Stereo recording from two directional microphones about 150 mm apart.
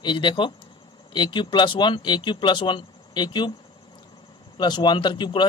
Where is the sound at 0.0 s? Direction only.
30° left (ahead or behind).